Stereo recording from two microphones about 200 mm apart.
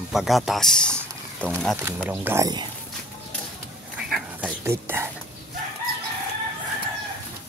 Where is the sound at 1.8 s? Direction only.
10° right (ahead or behind).